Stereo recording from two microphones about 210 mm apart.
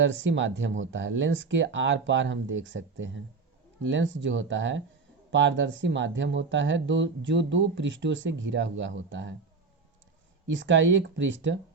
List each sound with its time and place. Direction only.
0.0 s speech: 60° right (ahead or behind)
10.5 s speech: 60° right (ahead or behind)